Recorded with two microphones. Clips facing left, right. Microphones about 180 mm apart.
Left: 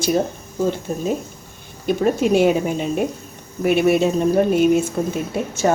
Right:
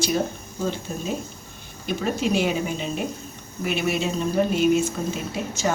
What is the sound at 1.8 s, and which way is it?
Speech, 50° left (ahead or behind).